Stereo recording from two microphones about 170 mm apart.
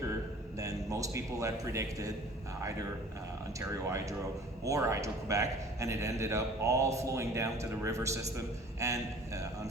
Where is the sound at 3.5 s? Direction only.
20° right (ahead or behind).